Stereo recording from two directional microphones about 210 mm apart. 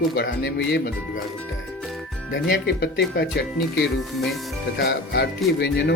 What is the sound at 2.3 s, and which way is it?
Speech, 50° left (ahead or behind).